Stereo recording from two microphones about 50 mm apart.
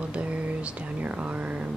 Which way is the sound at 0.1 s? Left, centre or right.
Right.